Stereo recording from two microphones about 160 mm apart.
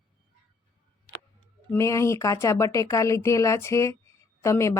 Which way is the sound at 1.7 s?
20° left (ahead or behind).